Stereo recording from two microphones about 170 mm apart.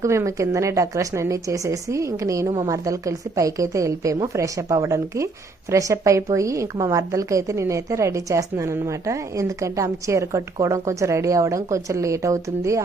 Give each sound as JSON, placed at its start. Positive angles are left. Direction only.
{"t": 0.0, "sound": "a woman's voice", "side_deg": -15}